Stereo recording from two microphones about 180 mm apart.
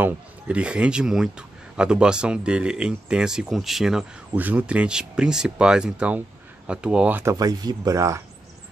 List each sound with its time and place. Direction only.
0.0 s speech: 5° right (ahead or behind)
7.3 s speech: 20° right (ahead or behind)